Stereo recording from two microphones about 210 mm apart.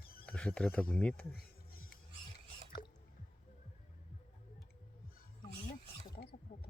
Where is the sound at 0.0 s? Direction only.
45° left (ahead or behind).